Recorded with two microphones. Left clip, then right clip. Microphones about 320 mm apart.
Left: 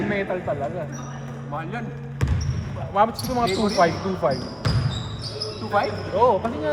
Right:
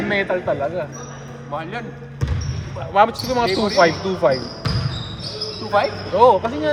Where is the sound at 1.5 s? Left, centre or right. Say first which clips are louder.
Right 4 dB; right.